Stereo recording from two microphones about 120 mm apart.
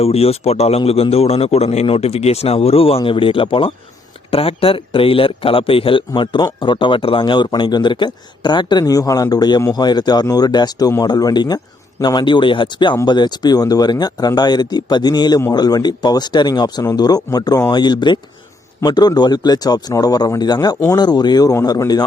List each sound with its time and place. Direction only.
0.0 s a man's voice: 55° left (ahead or behind); by 22.0 s 35° left (ahead or behind)